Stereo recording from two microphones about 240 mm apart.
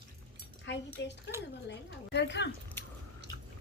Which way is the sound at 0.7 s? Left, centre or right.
Left.